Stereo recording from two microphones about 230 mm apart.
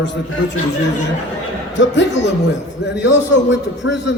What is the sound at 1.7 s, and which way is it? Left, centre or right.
A man's voice, left.